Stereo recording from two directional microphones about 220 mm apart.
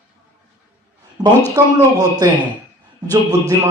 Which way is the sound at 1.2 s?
20° right (ahead or behind).